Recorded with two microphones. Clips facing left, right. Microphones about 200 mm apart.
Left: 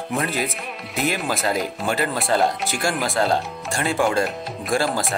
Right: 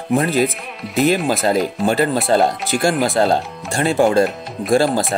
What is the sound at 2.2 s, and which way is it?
Speech, 35° right (ahead or behind).